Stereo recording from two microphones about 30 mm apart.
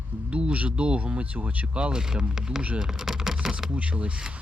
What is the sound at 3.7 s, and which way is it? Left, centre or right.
Speech, right.